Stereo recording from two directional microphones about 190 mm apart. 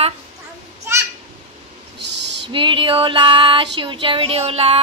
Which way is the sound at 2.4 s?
25° right (ahead or behind).